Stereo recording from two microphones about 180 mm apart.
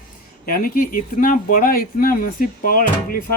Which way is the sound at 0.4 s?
55° left (ahead or behind).